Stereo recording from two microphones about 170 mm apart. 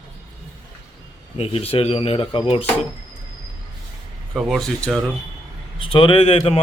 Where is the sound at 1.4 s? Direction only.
35° left (ahead or behind).